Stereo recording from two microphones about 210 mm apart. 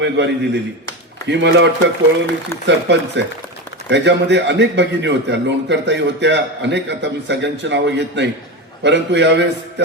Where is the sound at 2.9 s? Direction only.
55° right (ahead or behind).